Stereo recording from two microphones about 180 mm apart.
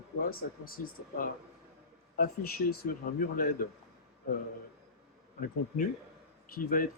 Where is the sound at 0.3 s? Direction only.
55° left (ahead or behind).